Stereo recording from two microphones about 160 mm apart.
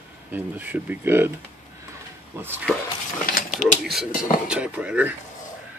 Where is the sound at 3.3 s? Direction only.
50° left (ahead or behind).